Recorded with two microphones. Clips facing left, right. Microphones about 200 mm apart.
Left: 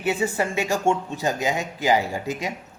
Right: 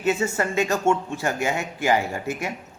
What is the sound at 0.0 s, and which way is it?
A man's voice, 15° left (ahead or behind).